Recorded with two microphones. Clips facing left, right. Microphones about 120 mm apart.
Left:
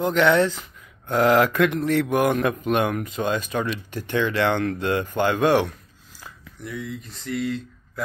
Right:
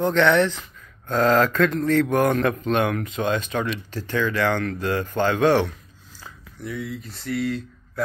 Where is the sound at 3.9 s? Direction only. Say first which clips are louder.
Left 1 dB; 20° left (ahead or behind).